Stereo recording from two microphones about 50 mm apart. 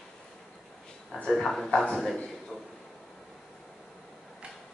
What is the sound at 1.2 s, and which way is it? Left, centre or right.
Speech, centre.